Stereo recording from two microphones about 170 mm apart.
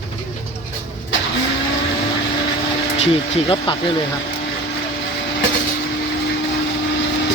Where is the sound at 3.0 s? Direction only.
35° left (ahead or behind).